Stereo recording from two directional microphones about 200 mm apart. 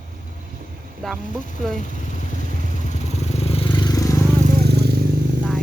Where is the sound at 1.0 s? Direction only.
Centre (ahead or behind).